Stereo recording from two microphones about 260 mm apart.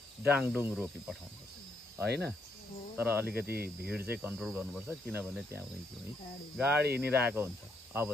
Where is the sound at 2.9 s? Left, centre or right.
Centre.